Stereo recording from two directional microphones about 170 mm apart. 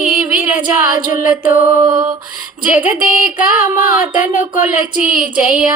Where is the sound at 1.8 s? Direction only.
25° right (ahead or behind).